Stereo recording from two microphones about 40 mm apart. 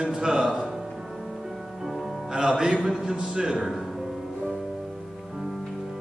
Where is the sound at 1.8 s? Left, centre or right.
Centre.